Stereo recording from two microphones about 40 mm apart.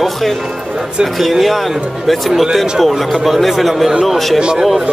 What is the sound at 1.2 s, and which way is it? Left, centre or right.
Speech, centre.